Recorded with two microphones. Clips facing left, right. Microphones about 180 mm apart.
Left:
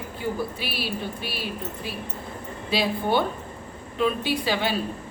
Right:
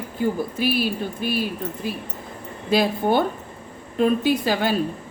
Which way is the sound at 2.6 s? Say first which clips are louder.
Right 5 dB; 45° right (ahead or behind).